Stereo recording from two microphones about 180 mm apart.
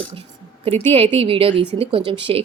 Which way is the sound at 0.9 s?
30° right (ahead or behind).